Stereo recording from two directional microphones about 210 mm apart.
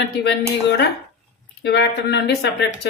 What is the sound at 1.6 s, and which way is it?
Speech, 55° left (ahead or behind).